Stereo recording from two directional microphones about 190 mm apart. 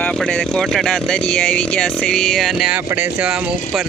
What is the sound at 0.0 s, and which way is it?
Speech, 5° left (ahead or behind).